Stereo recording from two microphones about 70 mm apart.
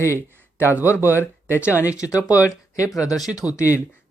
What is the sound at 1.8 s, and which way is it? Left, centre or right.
Speech, left.